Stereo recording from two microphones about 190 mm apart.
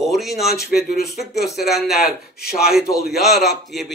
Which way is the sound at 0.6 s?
55° left (ahead or behind).